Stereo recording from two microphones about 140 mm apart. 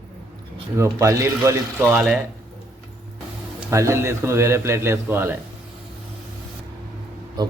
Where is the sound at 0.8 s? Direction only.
20° right (ahead or behind).